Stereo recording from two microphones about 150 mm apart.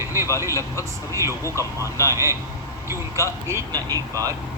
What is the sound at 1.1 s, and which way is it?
Speech, 20° right (ahead or behind).